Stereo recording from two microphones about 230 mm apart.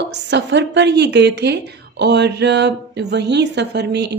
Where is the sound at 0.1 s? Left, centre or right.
Right.